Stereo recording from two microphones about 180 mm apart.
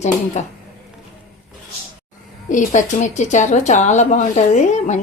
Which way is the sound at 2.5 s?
45° left (ahead or behind).